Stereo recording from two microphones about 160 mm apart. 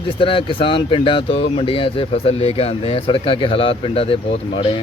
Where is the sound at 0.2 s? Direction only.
35° left (ahead or behind).